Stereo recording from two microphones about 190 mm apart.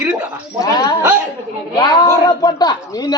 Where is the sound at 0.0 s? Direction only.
5° right (ahead or behind).